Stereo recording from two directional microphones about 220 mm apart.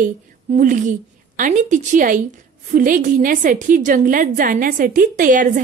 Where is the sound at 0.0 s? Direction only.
35° right (ahead or behind).